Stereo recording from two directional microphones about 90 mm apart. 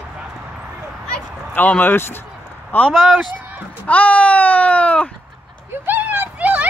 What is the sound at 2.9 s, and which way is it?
Speech, 5° left (ahead or behind).